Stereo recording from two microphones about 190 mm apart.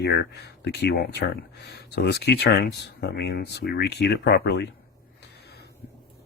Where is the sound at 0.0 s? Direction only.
60° left (ahead or behind).